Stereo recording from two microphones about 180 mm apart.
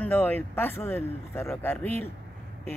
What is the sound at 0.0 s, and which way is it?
Speech, 10° left (ahead or behind).